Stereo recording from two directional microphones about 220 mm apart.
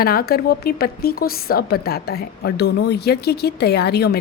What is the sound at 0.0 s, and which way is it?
A woman's voice, 45° left (ahead or behind).